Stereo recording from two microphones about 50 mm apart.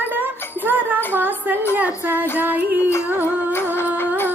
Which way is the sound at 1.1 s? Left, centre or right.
Right.